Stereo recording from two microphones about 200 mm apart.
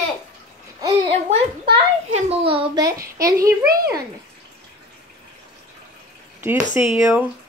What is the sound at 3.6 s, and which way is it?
Speech, 50° right (ahead or behind).